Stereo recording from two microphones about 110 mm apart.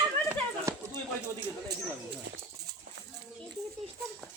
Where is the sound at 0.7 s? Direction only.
25° right (ahead or behind).